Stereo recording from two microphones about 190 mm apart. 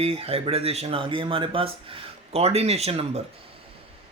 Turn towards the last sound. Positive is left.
turn(degrees=-30)  # may be behind; listen again after turning